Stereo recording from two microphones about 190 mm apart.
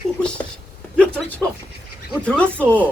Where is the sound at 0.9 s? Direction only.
5° left (ahead or behind).